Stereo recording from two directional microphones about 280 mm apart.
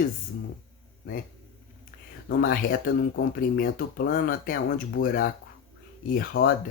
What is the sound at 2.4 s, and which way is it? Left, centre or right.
Speech, left.